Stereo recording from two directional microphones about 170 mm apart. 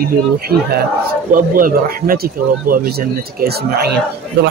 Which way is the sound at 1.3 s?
55° right (ahead or behind).